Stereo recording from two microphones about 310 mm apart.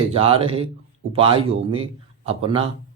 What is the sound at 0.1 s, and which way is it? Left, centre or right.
A man's voice, centre.